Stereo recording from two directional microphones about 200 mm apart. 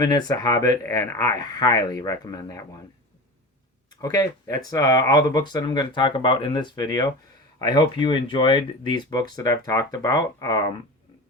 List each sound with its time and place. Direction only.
0.0 s speech: 20° left (ahead or behind)
3.8 s speech: 20° left (ahead or behind)